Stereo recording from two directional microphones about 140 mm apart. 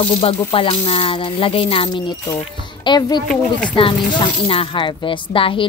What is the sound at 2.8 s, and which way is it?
Speech, 30° left (ahead or behind).